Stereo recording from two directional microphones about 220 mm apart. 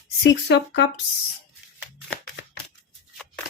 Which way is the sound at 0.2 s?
55° left (ahead or behind).